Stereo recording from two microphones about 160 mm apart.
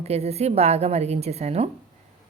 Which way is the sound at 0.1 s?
40° right (ahead or behind).